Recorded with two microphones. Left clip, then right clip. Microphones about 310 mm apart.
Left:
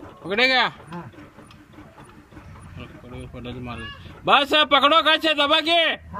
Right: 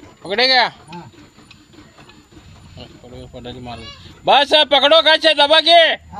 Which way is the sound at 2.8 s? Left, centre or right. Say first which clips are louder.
Right 3 dB; right.